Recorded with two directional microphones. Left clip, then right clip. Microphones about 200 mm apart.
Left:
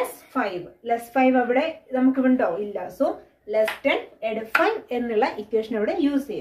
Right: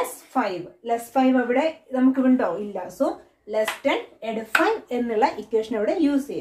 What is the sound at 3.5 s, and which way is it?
A woman's voice, 20° right (ahead or behind).